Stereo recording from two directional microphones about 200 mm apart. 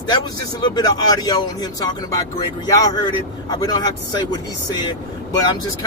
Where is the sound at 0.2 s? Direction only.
20° left (ahead or behind).